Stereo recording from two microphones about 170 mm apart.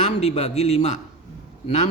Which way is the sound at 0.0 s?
40° left (ahead or behind).